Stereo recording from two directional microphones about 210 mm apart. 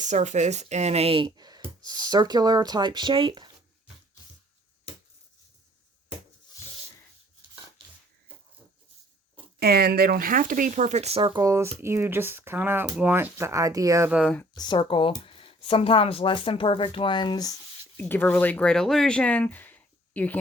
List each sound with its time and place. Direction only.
0.0 s speech: 35° right (ahead or behind)
9.6 s speech: 45° right (ahead or behind); by 14.3 s 5° right (ahead or behind)
14.5 s speech: 20° left (ahead or behind)
17.9 s speech: 10° left (ahead or behind)